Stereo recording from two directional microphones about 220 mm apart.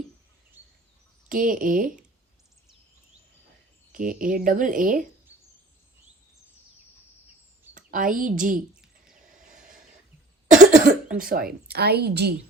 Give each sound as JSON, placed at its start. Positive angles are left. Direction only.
{"t": 1.3, "sound": "speech", "side_deg": -40}
{"t": 3.9, "sound": "speech", "side_deg": -40}
{"t": 7.7, "sound": "a woman's voice", "side_deg": -35}
{"t": 8.7, "sound": "bird", "side_deg": -5}
{"t": 10.6, "sound": "cough", "side_deg": -35}
{"t": 11.2, "sound": "speech", "side_deg": -40}